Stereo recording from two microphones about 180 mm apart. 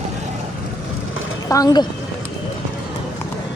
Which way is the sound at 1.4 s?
20° left (ahead or behind).